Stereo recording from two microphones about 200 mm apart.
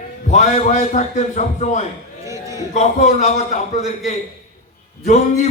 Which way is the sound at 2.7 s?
35° left (ahead or behind).